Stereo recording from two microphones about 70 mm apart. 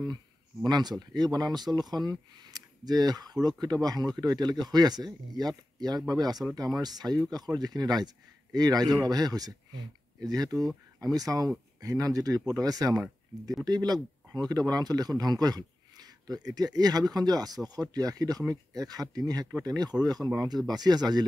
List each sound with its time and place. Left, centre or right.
0.7 s a man's voice: right